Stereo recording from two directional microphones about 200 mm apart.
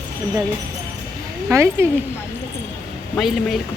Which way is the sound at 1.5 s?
15° right (ahead or behind).